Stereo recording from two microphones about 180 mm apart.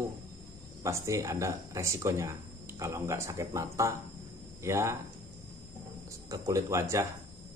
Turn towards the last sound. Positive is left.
turn(degrees=-15)  # may be behind; listen again after turning